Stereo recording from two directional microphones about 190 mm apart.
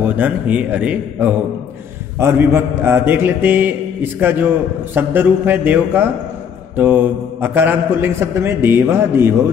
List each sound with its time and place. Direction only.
0.0 s a man's voice: 10° right (ahead or behind)